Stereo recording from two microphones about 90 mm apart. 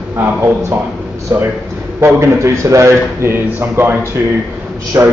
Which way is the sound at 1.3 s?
30° right (ahead or behind).